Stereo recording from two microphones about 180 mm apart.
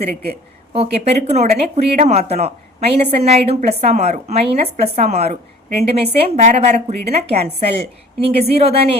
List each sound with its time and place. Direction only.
0.7 s speech: 35° right (ahead or behind)